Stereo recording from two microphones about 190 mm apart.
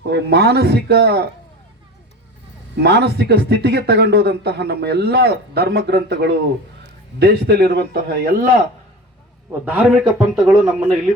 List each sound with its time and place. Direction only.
0.1 s speech: 60° right (ahead or behind)
2.7 s speech: 60° right (ahead or behind)
9.5 s a man's voice: 10° right (ahead or behind)